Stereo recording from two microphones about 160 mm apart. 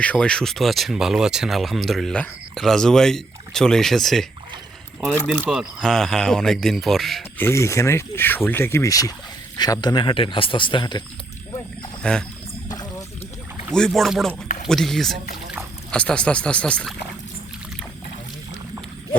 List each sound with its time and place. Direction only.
0.0 s speech: 5° left (ahead or behind)
7.3 s speech: 15° left (ahead or behind)
12.6 s a sound: 25° left (ahead or behind)
13.7 s speech: 5° left (ahead or behind)
14.4 s a sound: 55° left (ahead or behind)
14.7 s speech: centre (ahead or behind)